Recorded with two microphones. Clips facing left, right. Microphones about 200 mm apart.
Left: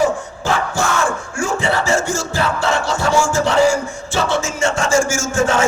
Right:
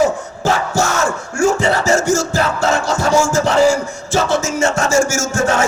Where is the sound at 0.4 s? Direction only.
40° right (ahead or behind).